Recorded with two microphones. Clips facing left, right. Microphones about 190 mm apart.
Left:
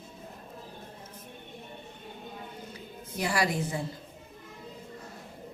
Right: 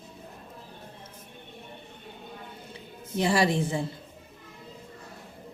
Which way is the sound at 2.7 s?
25° right (ahead or behind).